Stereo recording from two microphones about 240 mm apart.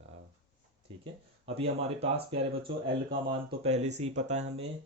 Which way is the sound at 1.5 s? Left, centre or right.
Right.